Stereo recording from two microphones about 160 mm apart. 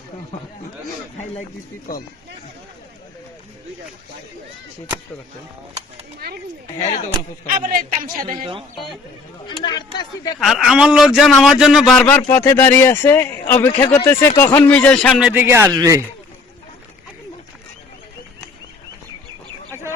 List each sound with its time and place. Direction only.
6.1 s speech: 75° right (ahead or behind)
7.5 s a woman's voice: 60° right (ahead or behind)
9.5 s speech: 30° left (ahead or behind)
10.4 s speech: centre (ahead or behind)
15.1 s speech: 10° right (ahead or behind)